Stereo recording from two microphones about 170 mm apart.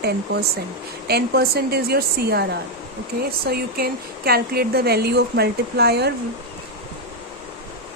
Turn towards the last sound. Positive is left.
turn(degrees=-70)  # may be behind; listen again after turning